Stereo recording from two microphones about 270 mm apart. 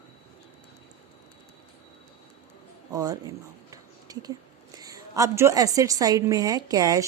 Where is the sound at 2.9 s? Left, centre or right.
Centre.